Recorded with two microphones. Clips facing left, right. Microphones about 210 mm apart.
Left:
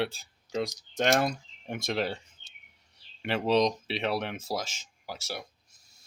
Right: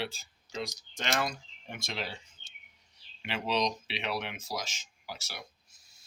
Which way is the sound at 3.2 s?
50° left (ahead or behind).